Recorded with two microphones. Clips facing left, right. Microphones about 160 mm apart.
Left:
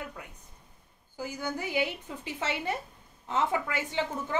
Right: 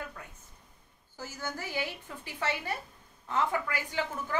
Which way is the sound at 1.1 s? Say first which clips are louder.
Left 5 dB; 15° left (ahead or behind).